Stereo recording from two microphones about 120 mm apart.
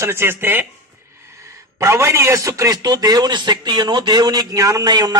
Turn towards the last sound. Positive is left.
turn(degrees=-35)  # may be behind; listen again after turning